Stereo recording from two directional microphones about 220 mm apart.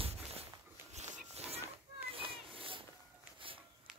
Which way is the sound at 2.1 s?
25° right (ahead or behind).